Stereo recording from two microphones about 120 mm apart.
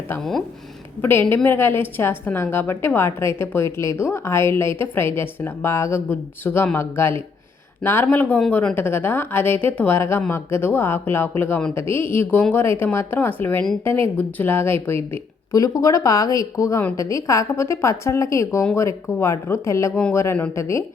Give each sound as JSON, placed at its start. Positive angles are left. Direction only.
{"t": 0.2, "sound": "speech", "side_deg": 0}
{"t": 1.0, "sound": "a woman's voice", "side_deg": 20}
{"t": 15.5, "sound": "a woman's voice", "side_deg": 30}